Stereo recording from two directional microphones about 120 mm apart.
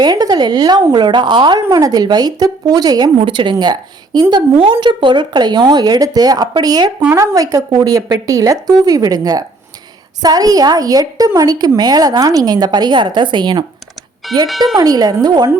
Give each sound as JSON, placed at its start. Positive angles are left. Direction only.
{"t": 0.0, "sound": "a woman's voice", "side_deg": -35}
{"t": 14.3, "sound": "speech", "side_deg": 0}
{"t": 14.8, "sound": "a woman's voice", "side_deg": -30}